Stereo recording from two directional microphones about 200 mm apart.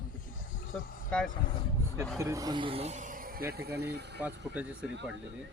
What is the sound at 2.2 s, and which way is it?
Speech, 15° right (ahead or behind).